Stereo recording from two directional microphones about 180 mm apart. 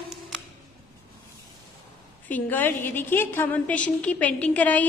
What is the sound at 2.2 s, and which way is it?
A woman's voice, 10° left (ahead or behind).